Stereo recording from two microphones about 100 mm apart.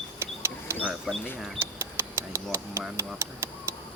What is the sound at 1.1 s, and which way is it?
Speech, 5° right (ahead or behind).